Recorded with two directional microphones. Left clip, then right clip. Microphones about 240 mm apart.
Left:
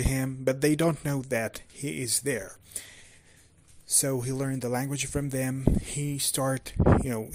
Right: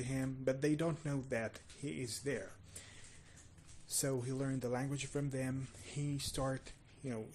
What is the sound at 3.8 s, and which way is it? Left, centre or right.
Speech, left.